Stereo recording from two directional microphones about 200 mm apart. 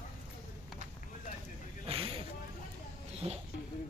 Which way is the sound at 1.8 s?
30° right (ahead or behind).